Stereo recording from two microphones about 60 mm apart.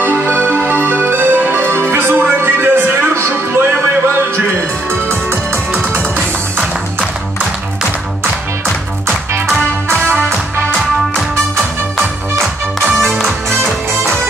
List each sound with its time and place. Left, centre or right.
0.0 s music: right